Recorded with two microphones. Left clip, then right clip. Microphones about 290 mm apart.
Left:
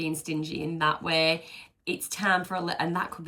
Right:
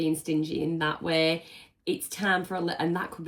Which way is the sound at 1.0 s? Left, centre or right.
Right.